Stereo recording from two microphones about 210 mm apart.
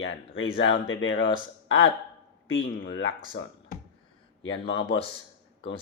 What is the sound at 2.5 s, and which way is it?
Speech, 65° left (ahead or behind).